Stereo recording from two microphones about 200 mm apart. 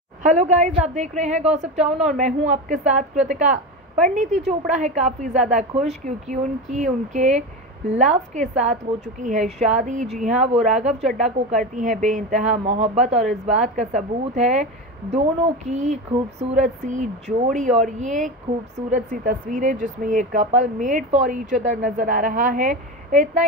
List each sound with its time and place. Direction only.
0.2 s speech: 35° right (ahead or behind)